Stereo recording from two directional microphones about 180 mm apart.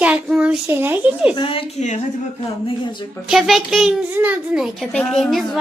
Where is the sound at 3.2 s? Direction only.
Centre (ahead or behind).